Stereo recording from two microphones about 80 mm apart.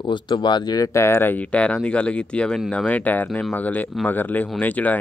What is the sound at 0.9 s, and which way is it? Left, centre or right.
Speech, left.